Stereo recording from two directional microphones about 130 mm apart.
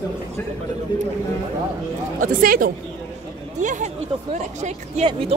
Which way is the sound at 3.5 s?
70° right (ahead or behind).